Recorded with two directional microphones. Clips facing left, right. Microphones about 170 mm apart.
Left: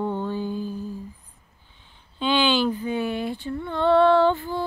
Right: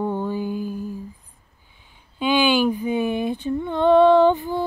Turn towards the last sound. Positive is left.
turn(degrees=-15)  # may be behind; listen again after turning